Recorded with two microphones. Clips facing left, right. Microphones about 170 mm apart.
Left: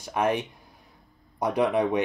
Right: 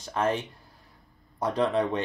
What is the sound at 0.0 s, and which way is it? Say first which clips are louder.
Speech: left 2 dB; 15° left (ahead or behind).